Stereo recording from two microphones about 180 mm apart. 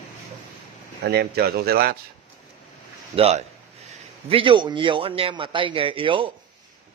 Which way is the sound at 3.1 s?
35° right (ahead or behind).